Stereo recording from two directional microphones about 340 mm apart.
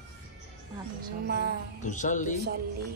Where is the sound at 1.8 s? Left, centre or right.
Left.